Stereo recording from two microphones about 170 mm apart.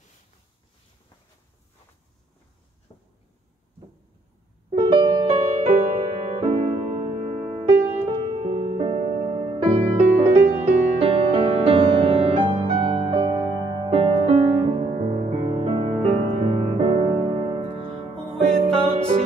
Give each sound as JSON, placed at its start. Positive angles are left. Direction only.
{"t": 2.9, "sound": "a sound", "side_deg": 30}
{"t": 4.7, "sound": "music", "side_deg": -25}
{"t": 7.6, "sound": "music", "side_deg": -20}
{"t": 8.3, "sound": "music", "side_deg": -35}
{"t": 11.0, "sound": "music", "side_deg": -30}